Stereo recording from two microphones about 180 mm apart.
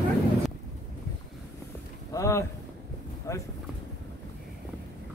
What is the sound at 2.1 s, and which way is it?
Speech, 15° left (ahead or behind).